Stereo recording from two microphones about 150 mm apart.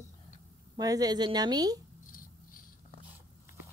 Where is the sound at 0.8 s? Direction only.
25° right (ahead or behind).